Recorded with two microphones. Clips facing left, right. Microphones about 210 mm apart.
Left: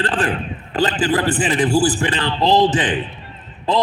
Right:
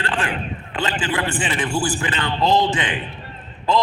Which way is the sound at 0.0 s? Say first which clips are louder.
Left 4 dB; 35° left (ahead or behind).